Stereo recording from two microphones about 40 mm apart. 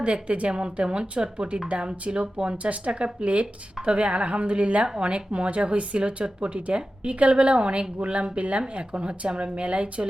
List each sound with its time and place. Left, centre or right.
0.0 s speech: right